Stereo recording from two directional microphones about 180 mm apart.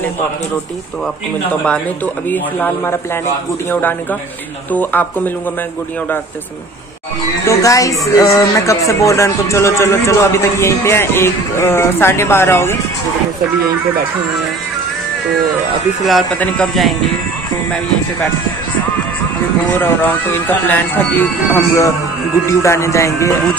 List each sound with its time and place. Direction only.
1.5 s speech: 5° left (ahead or behind)
4.7 s speech: 10° left (ahead or behind)
7.4 s speech: 20° left (ahead or behind)
16.0 s speech: centre (ahead or behind)
19.7 s speech: 10° left (ahead or behind)